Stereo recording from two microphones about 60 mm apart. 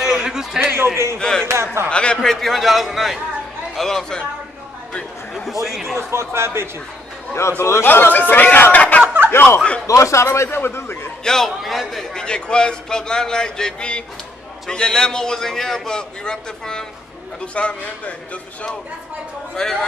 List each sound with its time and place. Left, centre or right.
0.0 s a sound: centre
1.1 s a man's voice: centre
1.5 s speech: right
1.9 s a man's voice: centre
2.2 s a man's voice: centre
5.3 s a man's voice: centre
5.9 s speech: right
7.3 s a man's voice: left
7.8 s speech: left
8.7 s a sound: left
9.0 s chuckle: right
9.8 s a man's voice: left
11.2 s a man's voice: centre; by 18.7 s left
19.5 s a man's voice: centre